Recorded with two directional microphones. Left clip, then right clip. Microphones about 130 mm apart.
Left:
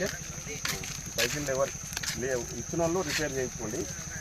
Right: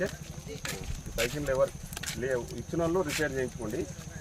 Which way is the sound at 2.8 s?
10° right (ahead or behind).